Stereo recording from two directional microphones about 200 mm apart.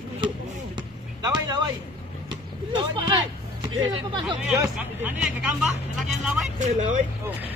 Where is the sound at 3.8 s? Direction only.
20° right (ahead or behind); by 6.5 s centre (ahead or behind).